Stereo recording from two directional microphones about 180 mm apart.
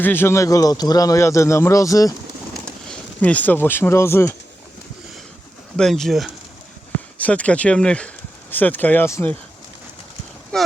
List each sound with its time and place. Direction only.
0.0 s speech: 10° left (ahead or behind)
2.6 s speech: 5° left (ahead or behind)
5.7 s speech: centre (ahead or behind)
10.5 s speech: 5° left (ahead or behind)